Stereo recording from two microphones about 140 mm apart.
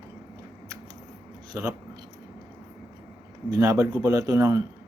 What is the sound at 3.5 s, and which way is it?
A man's voice, 25° right (ahead or behind).